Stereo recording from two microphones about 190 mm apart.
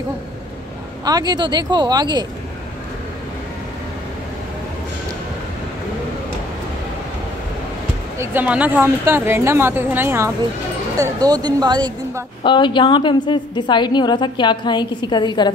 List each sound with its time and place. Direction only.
1.0 s speech: 20° right (ahead or behind)
8.2 s a woman's voice: 10° right (ahead or behind)
12.4 s a woman's voice: 25° left (ahead or behind)